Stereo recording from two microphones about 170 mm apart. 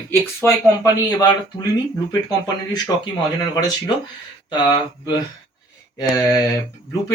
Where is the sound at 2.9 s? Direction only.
20° left (ahead or behind).